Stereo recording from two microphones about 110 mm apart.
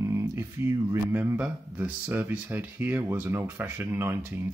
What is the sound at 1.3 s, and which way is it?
Speech, 15° right (ahead or behind).